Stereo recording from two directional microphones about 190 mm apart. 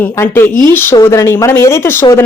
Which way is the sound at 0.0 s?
10° left (ahead or behind).